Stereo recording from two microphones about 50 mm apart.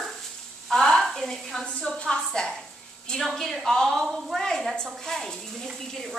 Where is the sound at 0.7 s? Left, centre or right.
Centre.